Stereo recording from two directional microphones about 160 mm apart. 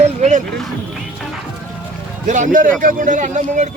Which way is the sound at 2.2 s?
50° right (ahead or behind).